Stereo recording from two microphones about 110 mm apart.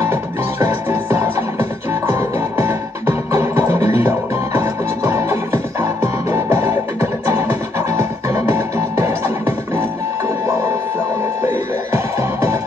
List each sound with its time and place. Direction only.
0.0 s music: 20° right (ahead or behind)
11.5 s music: 25° right (ahead or behind)